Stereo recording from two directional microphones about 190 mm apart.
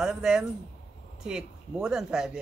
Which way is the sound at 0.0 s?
5° right (ahead or behind).